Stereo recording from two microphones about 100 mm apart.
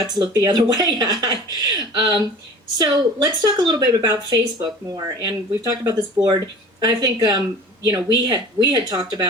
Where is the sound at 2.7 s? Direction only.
45° right (ahead or behind).